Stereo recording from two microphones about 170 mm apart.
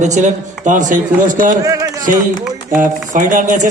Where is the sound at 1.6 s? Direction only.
20° right (ahead or behind).